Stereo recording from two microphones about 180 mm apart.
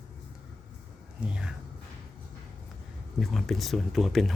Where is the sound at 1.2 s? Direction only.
5° right (ahead or behind).